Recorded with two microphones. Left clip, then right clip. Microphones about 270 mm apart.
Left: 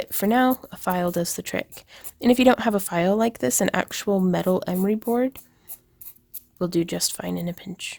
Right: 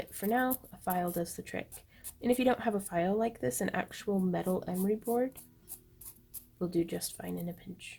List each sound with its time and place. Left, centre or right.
0.0 s speech: left
6.6 s speech: left